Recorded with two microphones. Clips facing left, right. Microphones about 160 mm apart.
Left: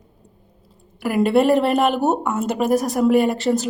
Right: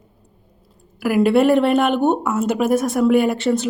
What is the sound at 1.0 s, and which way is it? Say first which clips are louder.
Speech: right 2 dB; centre (ahead or behind).